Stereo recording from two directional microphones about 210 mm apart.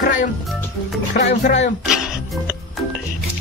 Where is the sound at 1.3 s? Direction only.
35° left (ahead or behind).